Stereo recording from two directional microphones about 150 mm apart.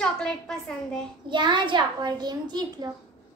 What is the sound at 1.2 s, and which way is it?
A child's voice, 30° right (ahead or behind).